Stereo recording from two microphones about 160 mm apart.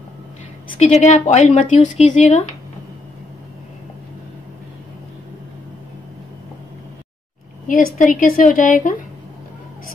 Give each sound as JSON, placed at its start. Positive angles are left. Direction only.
{"t": 0.7, "sound": "speech", "side_deg": 45}
{"t": 7.6, "sound": "speech", "side_deg": 55}